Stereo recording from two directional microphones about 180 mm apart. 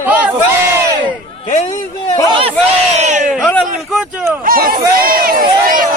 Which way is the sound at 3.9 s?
5° right (ahead or behind).